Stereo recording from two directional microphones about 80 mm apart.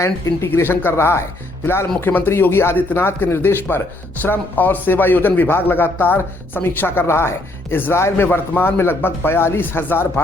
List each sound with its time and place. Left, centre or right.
0.0 s speech: left